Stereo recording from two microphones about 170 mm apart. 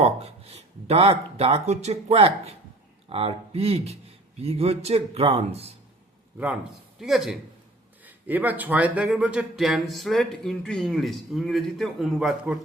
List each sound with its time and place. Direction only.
0.0 s speech: 40° right (ahead or behind)
7.0 s speech: centre (ahead or behind)